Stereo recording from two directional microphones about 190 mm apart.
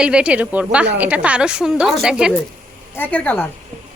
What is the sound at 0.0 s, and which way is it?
A woman's voice, 5° right (ahead or behind).